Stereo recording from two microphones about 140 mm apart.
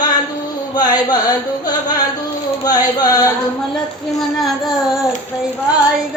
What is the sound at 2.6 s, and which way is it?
Speech, 25° left (ahead or behind).